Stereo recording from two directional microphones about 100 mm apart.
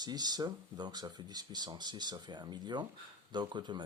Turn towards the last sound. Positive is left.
turn(degrees=-50)  # may be behind; listen again after turning